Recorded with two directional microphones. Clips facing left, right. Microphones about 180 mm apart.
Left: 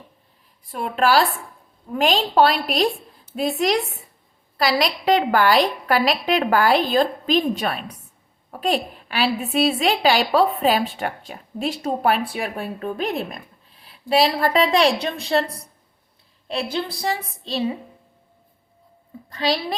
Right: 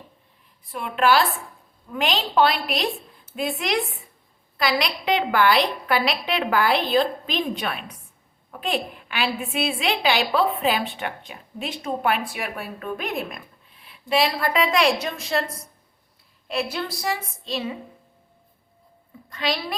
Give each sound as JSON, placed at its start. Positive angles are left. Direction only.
{"t": 0.7, "sound": "a woman's voice", "side_deg": 40}
{"t": 16.5, "sound": "a woman's voice", "side_deg": 30}
{"t": 19.3, "sound": "a woman's voice", "side_deg": 35}